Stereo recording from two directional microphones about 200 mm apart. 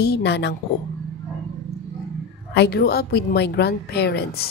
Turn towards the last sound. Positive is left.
turn(degrees=55)  # may be behind; listen again after turning